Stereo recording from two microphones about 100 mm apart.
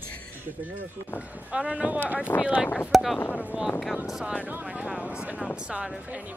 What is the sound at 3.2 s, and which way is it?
Speech, 15° left (ahead or behind).